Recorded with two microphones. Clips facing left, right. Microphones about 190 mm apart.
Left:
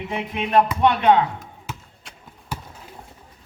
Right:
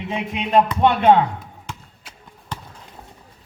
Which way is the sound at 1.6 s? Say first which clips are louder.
Left 1 dB; 5° left (ahead or behind).